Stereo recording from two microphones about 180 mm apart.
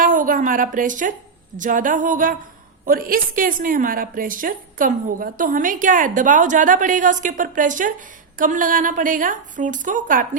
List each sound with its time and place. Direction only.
0.0 s a woman's voice: 50° right (ahead or behind)